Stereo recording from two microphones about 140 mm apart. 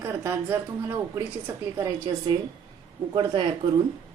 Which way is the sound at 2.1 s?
35° right (ahead or behind).